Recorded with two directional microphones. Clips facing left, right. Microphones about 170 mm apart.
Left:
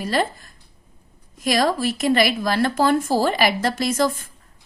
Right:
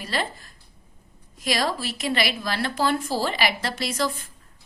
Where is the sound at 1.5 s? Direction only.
50° left (ahead or behind).